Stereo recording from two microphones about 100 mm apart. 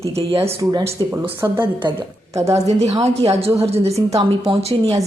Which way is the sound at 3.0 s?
90° right.